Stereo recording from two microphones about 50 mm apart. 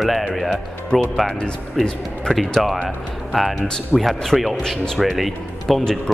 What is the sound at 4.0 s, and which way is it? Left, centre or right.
Speech, centre.